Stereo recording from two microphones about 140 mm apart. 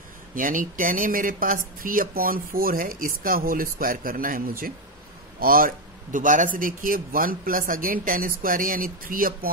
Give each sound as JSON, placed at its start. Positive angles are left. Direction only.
{"t": 0.4, "sound": "speech", "side_deg": -75}
{"t": 6.1, "sound": "speech", "side_deg": -65}